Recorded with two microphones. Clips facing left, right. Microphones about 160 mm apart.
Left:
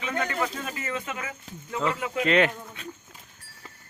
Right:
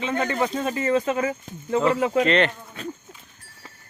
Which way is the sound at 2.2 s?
5° left (ahead or behind).